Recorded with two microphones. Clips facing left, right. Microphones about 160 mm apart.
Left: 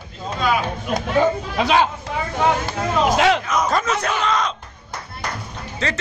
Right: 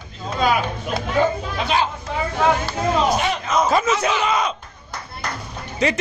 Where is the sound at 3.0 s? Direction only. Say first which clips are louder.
Left 4 dB; 90° left.